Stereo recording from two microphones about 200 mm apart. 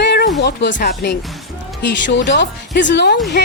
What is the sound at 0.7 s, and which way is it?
A woman's voice, 50° left (ahead or behind).